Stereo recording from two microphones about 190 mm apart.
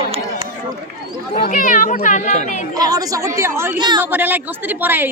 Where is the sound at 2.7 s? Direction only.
20° right (ahead or behind).